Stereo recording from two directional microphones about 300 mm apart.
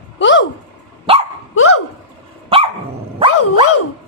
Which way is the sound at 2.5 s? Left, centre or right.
Centre.